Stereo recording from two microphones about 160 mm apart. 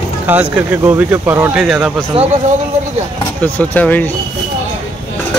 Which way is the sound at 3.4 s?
10° left (ahead or behind).